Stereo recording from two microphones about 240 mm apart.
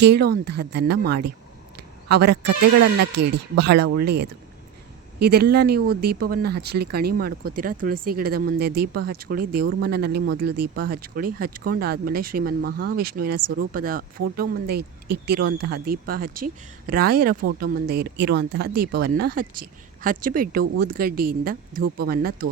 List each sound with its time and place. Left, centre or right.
0.0 s speech: right